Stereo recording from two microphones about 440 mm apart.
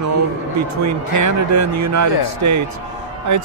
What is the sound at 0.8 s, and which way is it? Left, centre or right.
Speech, right.